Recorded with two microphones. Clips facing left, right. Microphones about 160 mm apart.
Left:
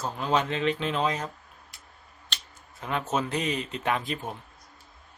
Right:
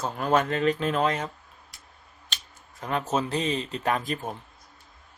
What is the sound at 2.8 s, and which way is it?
Speech, 35° right (ahead or behind).